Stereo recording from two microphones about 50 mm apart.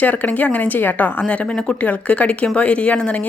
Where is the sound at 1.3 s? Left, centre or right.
Left.